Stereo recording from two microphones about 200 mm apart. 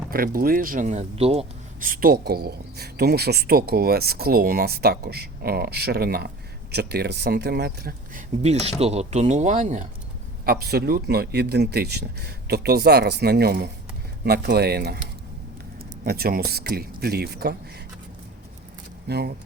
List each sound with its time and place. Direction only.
0.1 s speech: 45° right (ahead or behind); by 1.9 s 30° right (ahead or behind)
1.9 s speech: 50° right (ahead or behind)
8.4 s speech: 30° right (ahead or behind)
10.4 s speech: 50° right (ahead or behind)
19.0 s speech: 55° right (ahead or behind)